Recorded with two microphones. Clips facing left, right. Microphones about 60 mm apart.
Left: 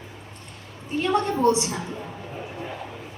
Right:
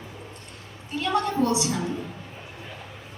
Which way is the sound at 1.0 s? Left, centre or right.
Left.